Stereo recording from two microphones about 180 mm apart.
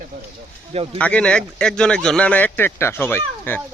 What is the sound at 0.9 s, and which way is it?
Speech, 5° left (ahead or behind).